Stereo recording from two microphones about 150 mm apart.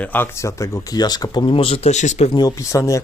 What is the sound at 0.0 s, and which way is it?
Speech, 15° left (ahead or behind).